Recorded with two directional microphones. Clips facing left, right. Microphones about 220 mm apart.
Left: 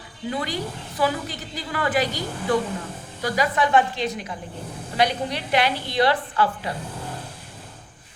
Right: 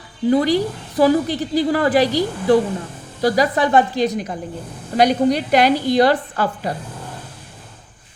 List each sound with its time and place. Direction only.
0.3 s a woman's voice: 35° right (ahead or behind)